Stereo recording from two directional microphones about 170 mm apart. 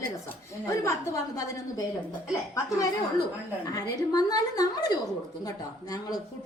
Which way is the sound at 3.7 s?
20° left (ahead or behind).